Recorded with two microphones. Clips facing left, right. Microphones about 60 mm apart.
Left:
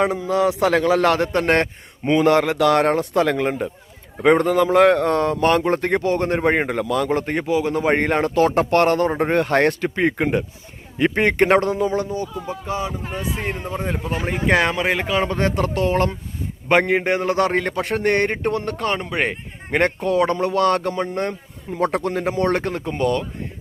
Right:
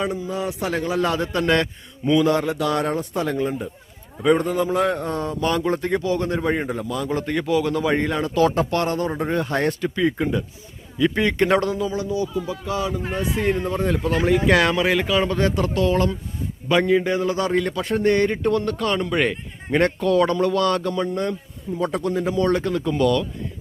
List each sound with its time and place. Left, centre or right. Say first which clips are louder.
0.0 s a man's voice: left 6 dB; left
1.3 s a man's voice: left 2 dB; left
2.2 s speech: left 5 dB; left
3.2 s speech: left 4 dB; left
7.1 s a man's voice: left 2 dB; left
7.4 s speech: left 1 dB; left
7.9 s speech: left 3 dB; left
11.1 s a man's voice: left 4 dB; left
21.7 s speech: left 2 dB; left